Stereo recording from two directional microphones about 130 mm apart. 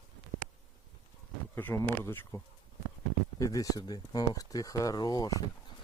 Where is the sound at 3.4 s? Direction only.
25° left (ahead or behind).